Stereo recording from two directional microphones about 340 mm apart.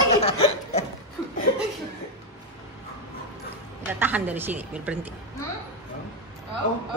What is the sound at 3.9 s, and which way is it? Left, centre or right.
A woman's voice, centre.